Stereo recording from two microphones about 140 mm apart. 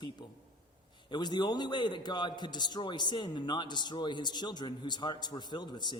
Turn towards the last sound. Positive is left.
turn(degrees=30)  # may be behind; listen again after turning